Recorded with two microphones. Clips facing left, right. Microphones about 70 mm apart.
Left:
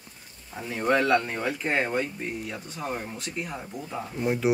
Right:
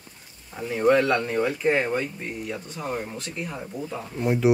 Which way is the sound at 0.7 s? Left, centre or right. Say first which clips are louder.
Right 3 dB; centre.